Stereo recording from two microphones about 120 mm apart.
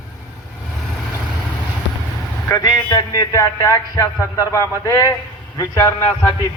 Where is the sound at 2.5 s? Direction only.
30° left (ahead or behind).